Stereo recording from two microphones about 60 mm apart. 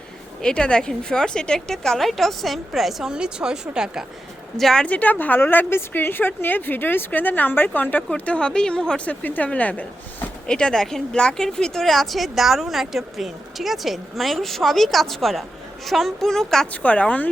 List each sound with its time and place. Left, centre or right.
0.4 s a woman's voice: centre
4.5 s a woman's voice: centre
4.9 s speech: left
9.0 s speech: left
10.4 s a woman's voice: centre
16.7 s speech: left